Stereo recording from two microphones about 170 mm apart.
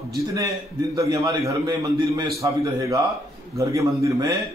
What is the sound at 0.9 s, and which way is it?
A man's voice, 20° right (ahead or behind).